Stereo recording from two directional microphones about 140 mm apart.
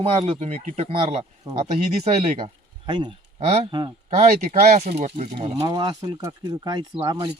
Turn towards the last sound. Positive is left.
turn(degrees=-30)  # may be behind; listen again after turning